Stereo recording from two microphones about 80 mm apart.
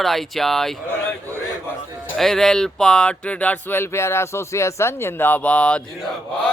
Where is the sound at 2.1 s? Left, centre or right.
Centre.